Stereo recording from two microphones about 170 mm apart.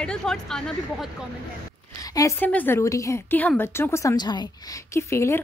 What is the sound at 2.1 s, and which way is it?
A woman's voice, 15° left (ahead or behind).